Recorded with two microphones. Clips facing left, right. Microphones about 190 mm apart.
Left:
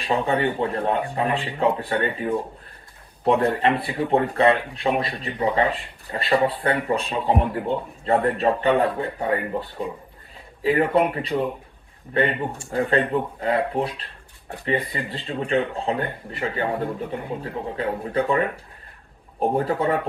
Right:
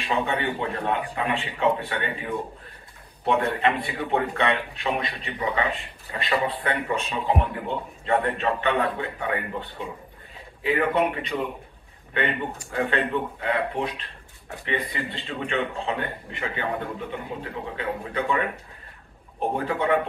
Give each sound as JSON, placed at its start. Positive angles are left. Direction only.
{"t": 0.0, "sound": "a man's voice", "side_deg": 35}
{"t": 19.5, "sound": "a man's voice", "side_deg": 35}